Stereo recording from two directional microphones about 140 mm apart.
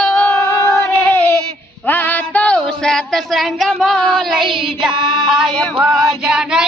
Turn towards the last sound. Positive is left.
turn(degrees=-5)  # may be behind; listen again after turning